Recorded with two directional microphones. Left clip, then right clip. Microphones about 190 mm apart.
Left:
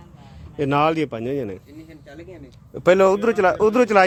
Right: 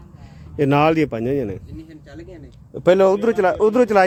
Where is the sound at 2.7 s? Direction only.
15° right (ahead or behind).